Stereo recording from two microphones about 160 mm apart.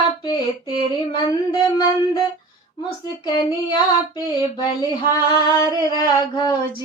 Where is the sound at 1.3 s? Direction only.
25° left (ahead or behind).